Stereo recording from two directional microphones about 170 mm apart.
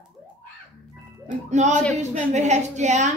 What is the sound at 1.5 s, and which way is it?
A woman's voice, 45° right (ahead or behind).